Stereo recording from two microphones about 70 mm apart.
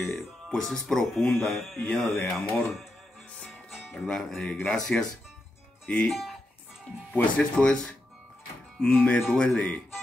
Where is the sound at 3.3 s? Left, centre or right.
Centre.